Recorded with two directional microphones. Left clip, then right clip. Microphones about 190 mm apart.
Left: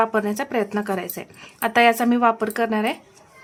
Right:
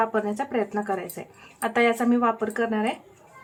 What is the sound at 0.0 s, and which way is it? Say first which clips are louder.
Speech: left 4 dB; 30° left (ahead or behind).